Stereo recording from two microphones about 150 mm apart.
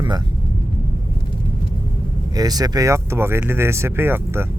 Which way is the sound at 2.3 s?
25° right (ahead or behind).